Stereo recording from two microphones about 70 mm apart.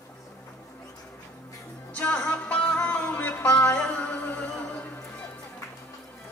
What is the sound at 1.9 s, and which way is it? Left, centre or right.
Music, centre.